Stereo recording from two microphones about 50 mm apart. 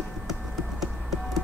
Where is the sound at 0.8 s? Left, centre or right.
Centre.